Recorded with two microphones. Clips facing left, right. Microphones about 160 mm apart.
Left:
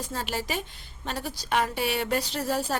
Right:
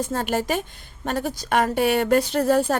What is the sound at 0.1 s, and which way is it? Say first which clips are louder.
Speech: right 8 dB; 55° right (ahead or behind).